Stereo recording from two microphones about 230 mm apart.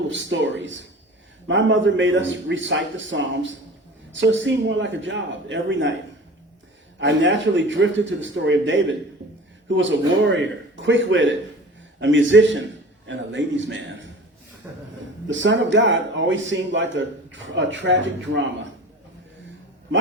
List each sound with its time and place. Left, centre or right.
0.1 s a man's voice: right
7.0 s a man's voice: right
14.6 s speech: centre
15.3 s a man's voice: right